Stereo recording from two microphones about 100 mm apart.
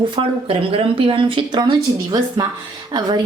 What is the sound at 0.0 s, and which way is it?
Speech, 55° right (ahead or behind).